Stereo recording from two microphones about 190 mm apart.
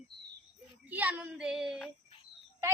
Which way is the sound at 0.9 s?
10° right (ahead or behind).